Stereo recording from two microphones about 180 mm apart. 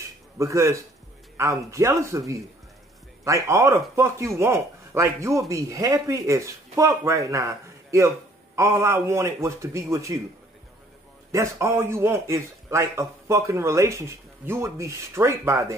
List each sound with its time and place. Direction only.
0.4 s speech: 15° right (ahead or behind)
11.3 s speech: 15° right (ahead or behind)